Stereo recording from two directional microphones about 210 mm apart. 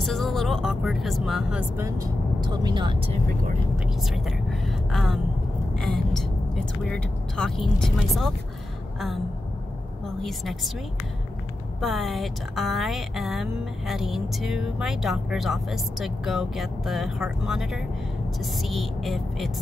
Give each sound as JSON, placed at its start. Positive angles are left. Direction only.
{"t": 0.0, "sound": "speech", "side_deg": 0}
{"t": 1.8, "sound": "speech", "side_deg": -15}
{"t": 3.8, "sound": "speech", "side_deg": 0}
{"t": 10.0, "sound": "speech", "side_deg": 0}
{"t": 11.8, "sound": "speech", "side_deg": 0}